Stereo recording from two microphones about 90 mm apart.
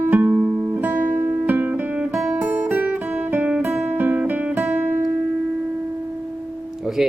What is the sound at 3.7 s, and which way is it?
Guitar, 20° right (ahead or behind).